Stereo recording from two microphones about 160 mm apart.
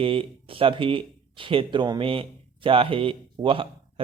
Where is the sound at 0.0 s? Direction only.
35° right (ahead or behind).